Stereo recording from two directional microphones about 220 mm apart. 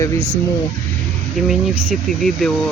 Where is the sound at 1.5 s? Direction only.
Centre (ahead or behind).